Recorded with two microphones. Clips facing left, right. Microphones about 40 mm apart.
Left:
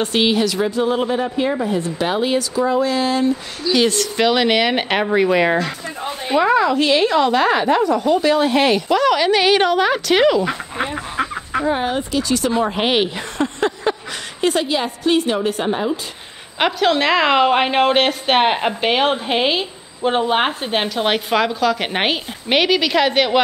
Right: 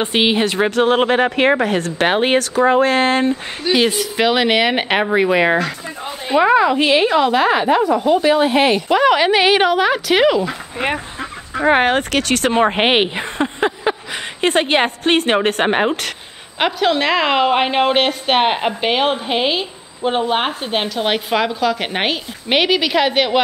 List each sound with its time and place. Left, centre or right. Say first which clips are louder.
0.0 s speech: right 1 dB; right
0.7 s speech: right 4 dB; right
3.7 s a woman's voice: right 1 dB; centre
11.6 s speech: right 8 dB; right; by 13.9 s centre
14.4 s speech: right 3 dB; right
16.5 s a woman's voice: even; centre